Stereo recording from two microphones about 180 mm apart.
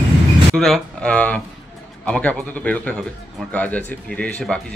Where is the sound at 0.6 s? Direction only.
5° left (ahead or behind).